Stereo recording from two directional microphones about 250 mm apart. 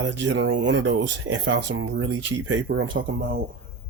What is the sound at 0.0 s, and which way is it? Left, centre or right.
Speech, right.